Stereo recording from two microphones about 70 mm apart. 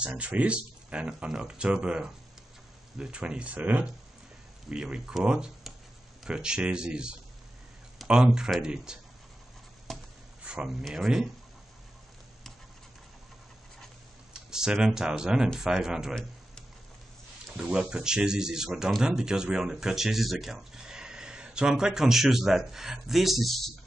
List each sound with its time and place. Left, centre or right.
0.0 s speech: right
9.9 s a sound: centre
10.4 s a sound: centre
10.8 s speech: centre
14.5 s speech: centre
17.6 s speech: centre